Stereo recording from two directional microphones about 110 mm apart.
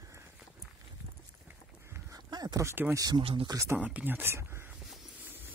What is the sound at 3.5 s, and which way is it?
Speech, 30° right (ahead or behind).